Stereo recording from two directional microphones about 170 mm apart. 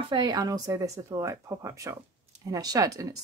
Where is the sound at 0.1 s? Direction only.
25° right (ahead or behind).